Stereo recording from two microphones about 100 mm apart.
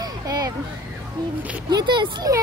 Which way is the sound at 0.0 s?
40° right (ahead or behind).